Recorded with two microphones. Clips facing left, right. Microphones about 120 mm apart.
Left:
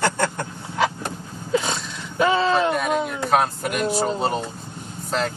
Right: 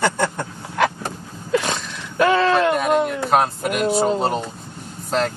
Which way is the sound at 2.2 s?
65° right (ahead or behind).